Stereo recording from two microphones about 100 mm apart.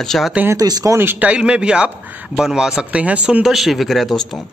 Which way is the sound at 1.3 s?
10° right (ahead or behind).